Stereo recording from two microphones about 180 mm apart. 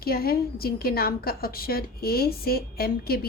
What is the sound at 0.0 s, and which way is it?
A woman's voice, 55° left (ahead or behind).